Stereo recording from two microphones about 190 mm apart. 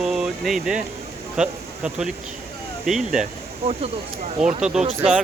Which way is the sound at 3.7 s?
30° right (ahead or behind).